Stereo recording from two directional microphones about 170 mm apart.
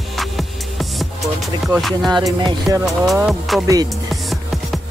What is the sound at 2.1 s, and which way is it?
Music, 20° right (ahead or behind).